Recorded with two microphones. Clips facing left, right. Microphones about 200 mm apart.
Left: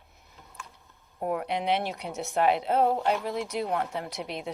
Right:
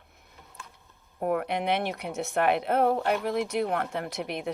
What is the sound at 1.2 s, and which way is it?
A woman's voice, 55° right (ahead or behind).